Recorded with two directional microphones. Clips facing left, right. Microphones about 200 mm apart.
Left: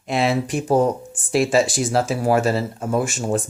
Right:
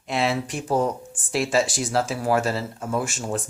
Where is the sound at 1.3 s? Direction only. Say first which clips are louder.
Left 5 dB; 15° left (ahead or behind).